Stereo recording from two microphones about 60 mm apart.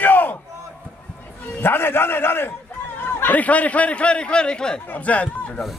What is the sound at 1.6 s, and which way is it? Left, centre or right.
Speech, left.